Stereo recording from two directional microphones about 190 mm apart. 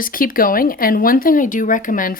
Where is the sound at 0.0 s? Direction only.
50° left (ahead or behind).